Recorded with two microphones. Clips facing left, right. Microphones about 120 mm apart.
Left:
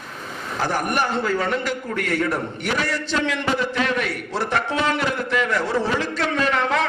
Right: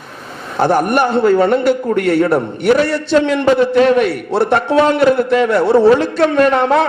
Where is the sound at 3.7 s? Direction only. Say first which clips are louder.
Right 12 dB; 45° right (ahead or behind).